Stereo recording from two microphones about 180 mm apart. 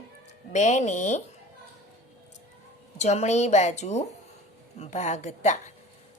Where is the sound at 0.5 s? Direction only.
40° left (ahead or behind).